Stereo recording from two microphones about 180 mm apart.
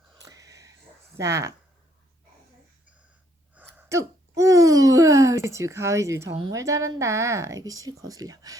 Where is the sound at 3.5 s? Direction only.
10° right (ahead or behind).